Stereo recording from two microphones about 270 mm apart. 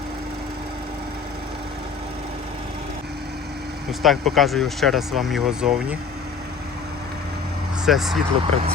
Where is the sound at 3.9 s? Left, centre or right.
Centre.